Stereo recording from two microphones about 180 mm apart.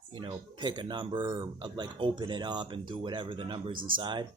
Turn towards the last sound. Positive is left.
turn(degrees=-25)  # may be behind; listen again after turning